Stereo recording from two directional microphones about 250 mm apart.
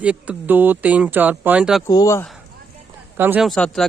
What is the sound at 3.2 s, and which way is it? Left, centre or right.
Speech, centre.